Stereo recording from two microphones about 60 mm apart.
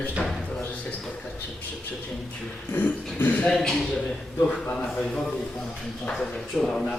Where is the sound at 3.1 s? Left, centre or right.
Left.